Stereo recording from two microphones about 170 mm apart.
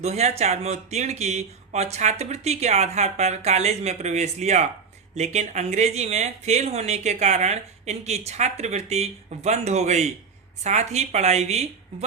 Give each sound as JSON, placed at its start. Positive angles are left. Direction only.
{"t": 0.0, "sound": "speech", "side_deg": -40}